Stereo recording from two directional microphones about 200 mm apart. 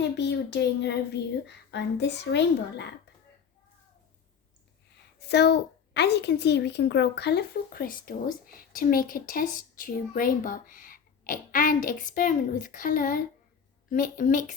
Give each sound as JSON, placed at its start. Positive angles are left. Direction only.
{"t": 0.2, "sound": "speech", "side_deg": 60}
{"t": 5.2, "sound": "a woman's voice", "side_deg": 55}